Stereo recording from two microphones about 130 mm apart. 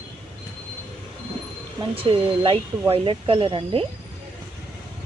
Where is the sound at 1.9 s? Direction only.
45° right (ahead or behind).